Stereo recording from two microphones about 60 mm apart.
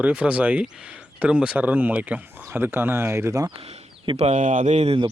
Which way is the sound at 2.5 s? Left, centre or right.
Right.